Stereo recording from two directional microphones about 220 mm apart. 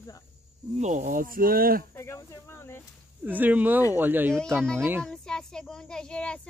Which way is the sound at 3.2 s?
10° right (ahead or behind).